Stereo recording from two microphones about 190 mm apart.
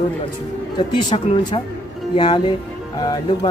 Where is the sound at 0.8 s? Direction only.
25° left (ahead or behind).